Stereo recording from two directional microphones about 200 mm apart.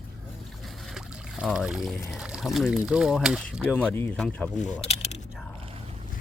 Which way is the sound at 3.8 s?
10° left (ahead or behind).